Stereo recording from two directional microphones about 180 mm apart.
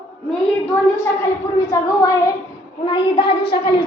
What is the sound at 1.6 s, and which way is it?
Speech, 20° left (ahead or behind).